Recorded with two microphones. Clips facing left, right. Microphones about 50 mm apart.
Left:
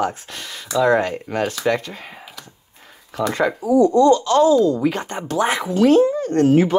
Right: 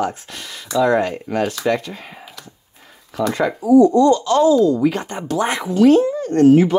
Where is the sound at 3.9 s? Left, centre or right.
Left.